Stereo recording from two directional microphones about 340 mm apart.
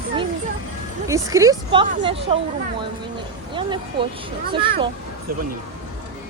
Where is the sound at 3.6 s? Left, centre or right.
Centre.